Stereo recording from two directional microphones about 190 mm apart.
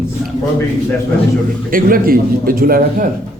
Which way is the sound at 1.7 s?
50° right (ahead or behind).